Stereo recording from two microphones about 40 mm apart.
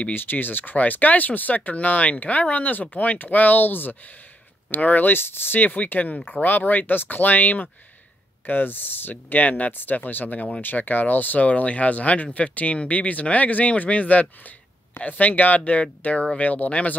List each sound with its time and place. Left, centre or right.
0.1 s speech: left
9.1 s speech: left